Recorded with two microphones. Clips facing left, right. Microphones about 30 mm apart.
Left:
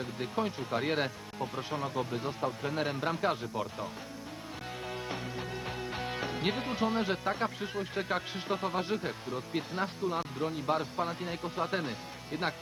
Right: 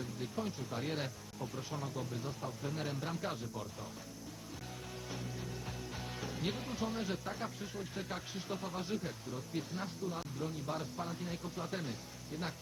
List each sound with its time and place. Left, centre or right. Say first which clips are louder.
0.0 s speech: left 7 dB; left
4.9 s speech: left 7 dB; left